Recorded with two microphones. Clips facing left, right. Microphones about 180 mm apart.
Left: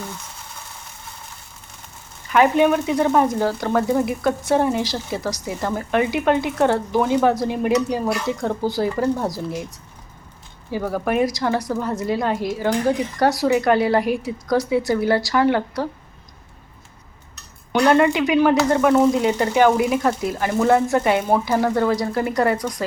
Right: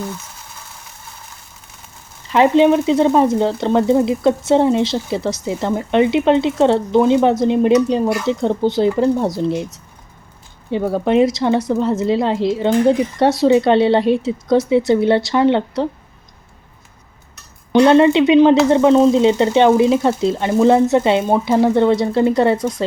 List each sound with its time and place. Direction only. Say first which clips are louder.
2.3 s speech: right 4 dB; 25° right (ahead or behind)
17.7 s speech: right 6 dB; 25° right (ahead or behind)